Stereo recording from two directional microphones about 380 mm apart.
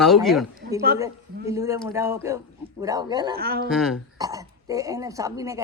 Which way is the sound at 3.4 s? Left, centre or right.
Right.